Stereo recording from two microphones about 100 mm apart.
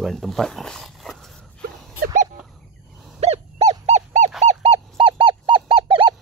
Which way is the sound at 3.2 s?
90° right.